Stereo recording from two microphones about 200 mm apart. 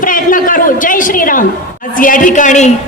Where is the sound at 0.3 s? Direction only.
45° left (ahead or behind).